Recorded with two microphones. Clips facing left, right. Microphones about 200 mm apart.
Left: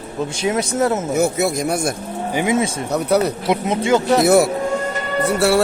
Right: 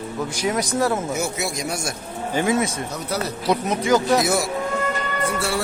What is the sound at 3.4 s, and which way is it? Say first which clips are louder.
Speech: left 2 dB; 25° left (ahead or behind).